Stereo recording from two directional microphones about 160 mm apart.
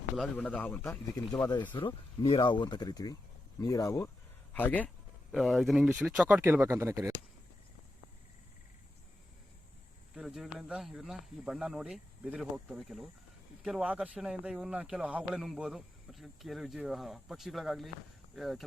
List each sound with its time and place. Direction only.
0.2 s a man's voice: 5° left (ahead or behind)
1.3 s a man's voice: 25° left (ahead or behind)
5.3 s speech: centre (ahead or behind)
6.2 s speech: 15° right (ahead or behind)
10.2 s speech: centre (ahead or behind)